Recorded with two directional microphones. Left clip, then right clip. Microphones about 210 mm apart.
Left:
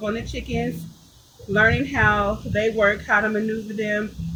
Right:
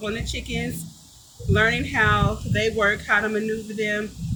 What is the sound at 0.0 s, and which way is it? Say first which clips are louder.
Speech: left 2 dB; 30° right (ahead or behind).